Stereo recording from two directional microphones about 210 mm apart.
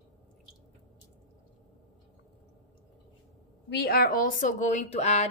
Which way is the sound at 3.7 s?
50° left (ahead or behind).